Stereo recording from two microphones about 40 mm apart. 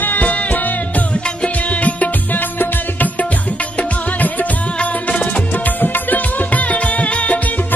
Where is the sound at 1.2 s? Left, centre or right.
Left.